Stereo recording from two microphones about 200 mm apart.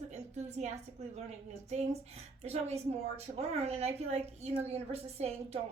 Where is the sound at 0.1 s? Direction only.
35° right (ahead or behind).